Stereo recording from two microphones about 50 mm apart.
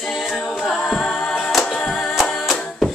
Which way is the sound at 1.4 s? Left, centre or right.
Centre.